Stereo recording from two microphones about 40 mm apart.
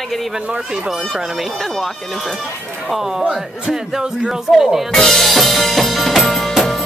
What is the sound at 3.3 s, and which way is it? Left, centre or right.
A man's voice, centre.